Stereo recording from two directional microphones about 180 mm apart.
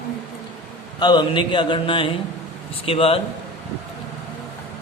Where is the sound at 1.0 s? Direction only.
25° left (ahead or behind).